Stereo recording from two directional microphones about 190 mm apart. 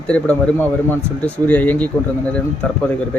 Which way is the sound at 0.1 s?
10° left (ahead or behind).